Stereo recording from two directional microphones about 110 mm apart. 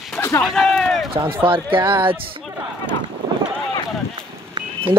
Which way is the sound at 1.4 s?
50° right (ahead or behind).